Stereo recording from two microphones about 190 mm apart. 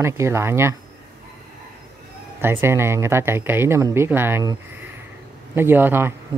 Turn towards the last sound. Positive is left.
turn(degrees=-10)  # may be behind; listen again after turning